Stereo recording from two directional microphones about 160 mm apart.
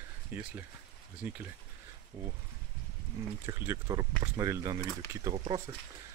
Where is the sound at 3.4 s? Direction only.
20° right (ahead or behind).